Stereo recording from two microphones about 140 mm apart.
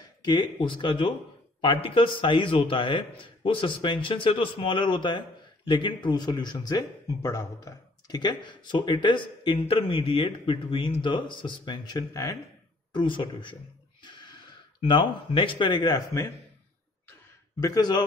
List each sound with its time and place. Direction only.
0.2 s speech: 30° left (ahead or behind)
12.9 s speech: 35° left (ahead or behind)
14.8 s speech: 35° left (ahead or behind)
17.6 s speech: 25° left (ahead or behind)